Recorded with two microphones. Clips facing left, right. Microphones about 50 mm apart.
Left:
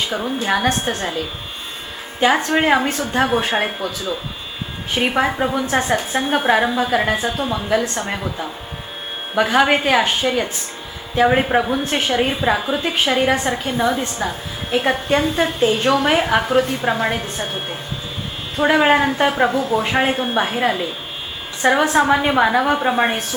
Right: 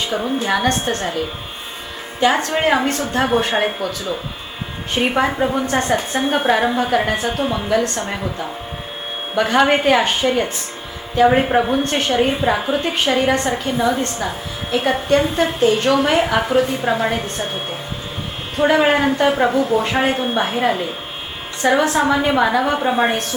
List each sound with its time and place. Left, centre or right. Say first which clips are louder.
0.1 s a woman's voice: right 2 dB; centre
2.2 s a woman's voice: left 1 dB; centre
3.8 s speech: right 1 dB; right
4.9 s a woman's voice: right 1 dB; centre
7.3 s a woman's voice: right 1 dB; centre
8.1 s a woman's voice: right 1 dB; centre
12.5 s speech: right 1 dB; centre
12.8 s a woman's voice: even; centre
18.6 s a woman's voice: even; centre